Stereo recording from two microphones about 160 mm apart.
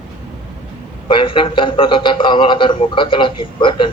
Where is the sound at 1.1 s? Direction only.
30° left (ahead or behind).